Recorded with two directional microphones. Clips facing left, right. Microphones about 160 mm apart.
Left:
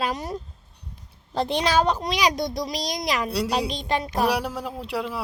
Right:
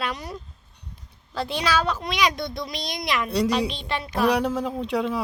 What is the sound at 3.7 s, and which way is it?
Speech, 40° left (ahead or behind).